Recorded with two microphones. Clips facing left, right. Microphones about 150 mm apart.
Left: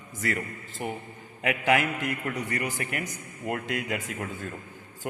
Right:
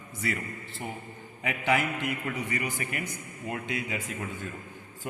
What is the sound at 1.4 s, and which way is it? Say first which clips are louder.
Speech: left 3 dB; 80° left.